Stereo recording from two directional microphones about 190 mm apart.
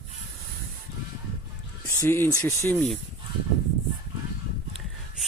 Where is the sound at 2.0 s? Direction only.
10° left (ahead or behind).